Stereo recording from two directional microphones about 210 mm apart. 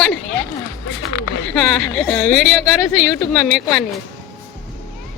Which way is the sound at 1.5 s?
5° left (ahead or behind).